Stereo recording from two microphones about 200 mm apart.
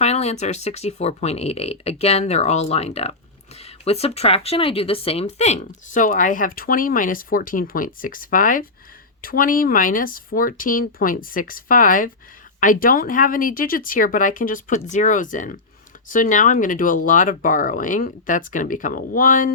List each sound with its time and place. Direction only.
0.0 s speech: 35° left (ahead or behind)